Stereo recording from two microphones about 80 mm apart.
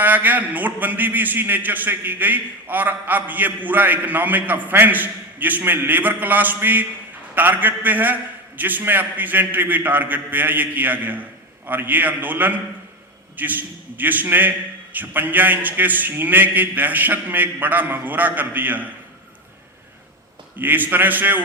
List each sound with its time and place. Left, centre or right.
0.0 s a man's voice: right
20.6 s a man's voice: right